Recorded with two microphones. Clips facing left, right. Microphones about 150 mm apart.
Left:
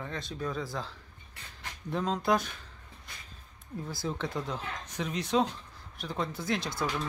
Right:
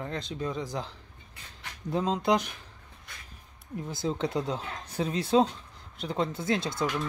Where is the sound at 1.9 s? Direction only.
20° right (ahead or behind).